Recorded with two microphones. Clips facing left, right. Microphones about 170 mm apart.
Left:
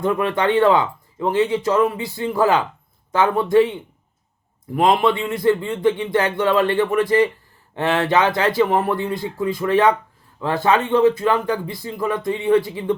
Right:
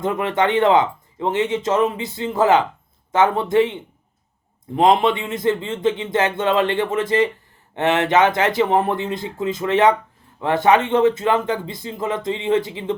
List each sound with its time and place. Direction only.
0.0 s speech: 20° right (ahead or behind)